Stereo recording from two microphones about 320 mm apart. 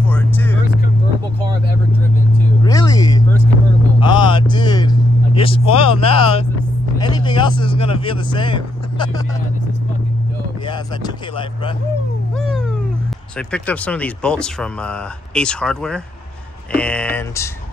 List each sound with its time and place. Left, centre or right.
0.1 s vehicle: centre
2.6 s a sound: centre
7.0 s vehicle: centre
10.7 s speech: centre
13.4 s speech: centre